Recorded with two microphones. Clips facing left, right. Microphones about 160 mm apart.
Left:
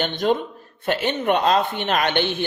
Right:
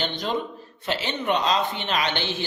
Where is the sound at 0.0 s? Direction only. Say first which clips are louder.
Left 6 dB; 55° left (ahead or behind).